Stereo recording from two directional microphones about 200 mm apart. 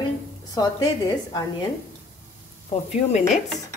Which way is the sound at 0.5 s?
20° left (ahead or behind).